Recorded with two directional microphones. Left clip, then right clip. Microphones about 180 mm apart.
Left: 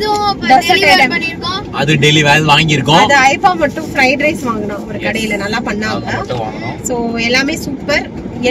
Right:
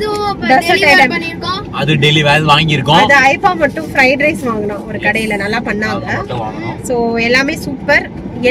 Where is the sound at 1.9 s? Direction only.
15° left (ahead or behind).